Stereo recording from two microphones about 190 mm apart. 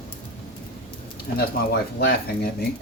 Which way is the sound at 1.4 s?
55° left (ahead or behind).